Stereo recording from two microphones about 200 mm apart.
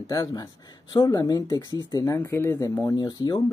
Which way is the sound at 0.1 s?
15° left (ahead or behind).